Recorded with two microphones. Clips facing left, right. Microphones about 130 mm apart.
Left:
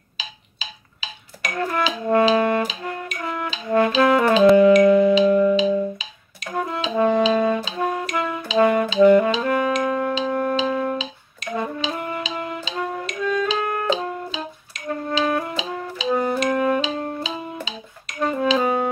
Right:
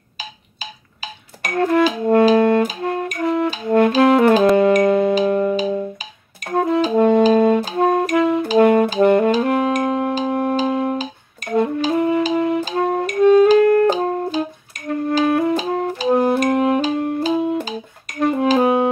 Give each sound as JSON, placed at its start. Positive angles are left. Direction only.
{"t": 0.2, "sound": "music", "side_deg": -50}